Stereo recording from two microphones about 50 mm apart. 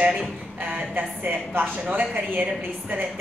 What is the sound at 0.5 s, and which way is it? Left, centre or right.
A woman's voice, right.